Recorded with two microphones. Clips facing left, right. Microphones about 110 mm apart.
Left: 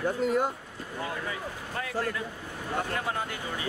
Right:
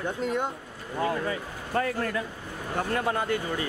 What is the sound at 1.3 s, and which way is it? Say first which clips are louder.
Speech: right 3 dB; 50° right (ahead or behind).